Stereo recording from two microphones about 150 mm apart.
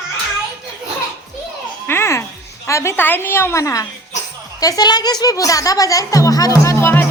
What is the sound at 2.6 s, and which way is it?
Speech, 20° left (ahead or behind).